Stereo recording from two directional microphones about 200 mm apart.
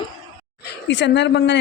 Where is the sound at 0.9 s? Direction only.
60° left (ahead or behind).